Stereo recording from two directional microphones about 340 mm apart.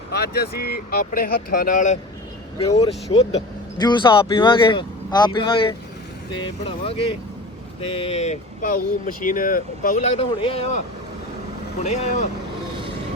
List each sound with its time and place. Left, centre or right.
0.1 s speech: left
2.6 s speech: centre
11.8 s speech: centre